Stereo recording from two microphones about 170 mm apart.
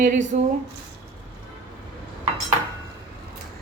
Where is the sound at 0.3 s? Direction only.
45° right (ahead or behind).